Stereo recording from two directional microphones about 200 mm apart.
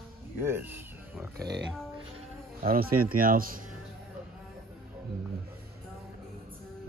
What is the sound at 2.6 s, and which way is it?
Speech, 45° right (ahead or behind).